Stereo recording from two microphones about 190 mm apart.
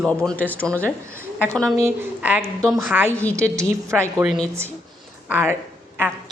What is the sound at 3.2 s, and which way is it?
Speech, 5° left (ahead or behind).